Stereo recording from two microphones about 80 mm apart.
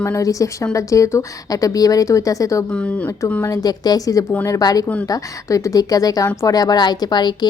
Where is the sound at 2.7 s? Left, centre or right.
Centre.